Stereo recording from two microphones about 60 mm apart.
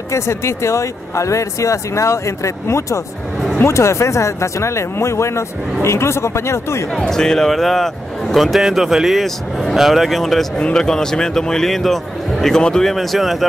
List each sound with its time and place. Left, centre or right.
0.1 s speech: left
7.1 s a man's voice: centre